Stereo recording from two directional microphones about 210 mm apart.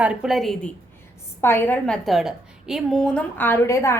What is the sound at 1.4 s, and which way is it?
A woman's voice, 10° left (ahead or behind).